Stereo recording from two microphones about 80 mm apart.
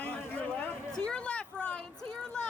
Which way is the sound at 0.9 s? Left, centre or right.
Centre.